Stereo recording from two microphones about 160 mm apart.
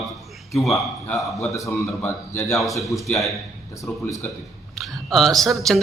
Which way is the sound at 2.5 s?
Centre (ahead or behind).